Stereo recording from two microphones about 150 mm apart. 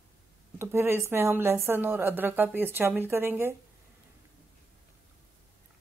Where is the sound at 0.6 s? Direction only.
15° right (ahead or behind).